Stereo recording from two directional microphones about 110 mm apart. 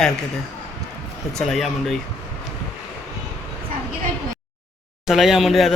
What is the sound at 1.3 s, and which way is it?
Speech, centre (ahead or behind).